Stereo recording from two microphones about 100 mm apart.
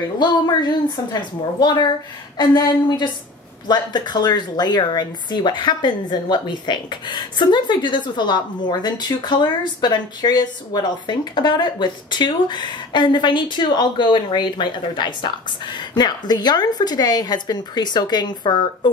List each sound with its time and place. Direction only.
0.2 s speech: 45° left (ahead or behind)